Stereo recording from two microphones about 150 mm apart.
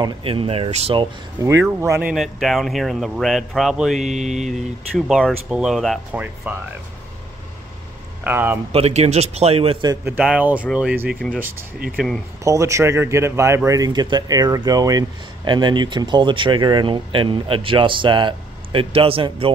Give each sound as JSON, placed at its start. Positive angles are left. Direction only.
{"t": 0.0, "sound": "speech", "side_deg": -35}
{"t": 1.4, "sound": "speech", "side_deg": -15}
{"t": 2.1, "sound": "speech", "side_deg": 0}
{"t": 4.0, "sound": "a man's voice", "side_deg": -50}
{"t": 4.5, "sound": "speech", "side_deg": 0}
{"t": 8.2, "sound": "speech", "side_deg": -15}
{"t": 8.7, "sound": "a man's voice", "side_deg": -45}
{"t": 10.0, "sound": "speech", "side_deg": -10}
{"t": 12.4, "sound": "speech", "side_deg": -20}